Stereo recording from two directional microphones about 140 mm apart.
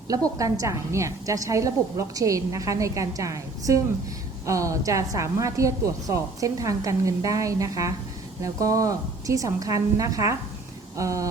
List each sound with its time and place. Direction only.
0.3 s a woman's voice: 25° right (ahead or behind)